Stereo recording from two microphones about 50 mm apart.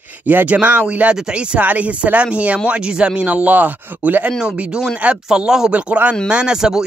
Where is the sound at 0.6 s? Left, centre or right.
Right.